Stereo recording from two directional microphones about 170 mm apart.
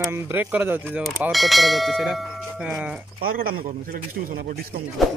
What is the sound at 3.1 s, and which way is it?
A man's voice, 60° right (ahead or behind).